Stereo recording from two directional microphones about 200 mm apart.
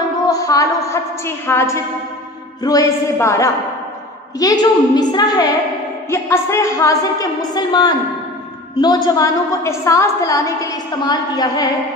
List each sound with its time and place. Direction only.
0.3 s a woman's voice: 15° left (ahead or behind)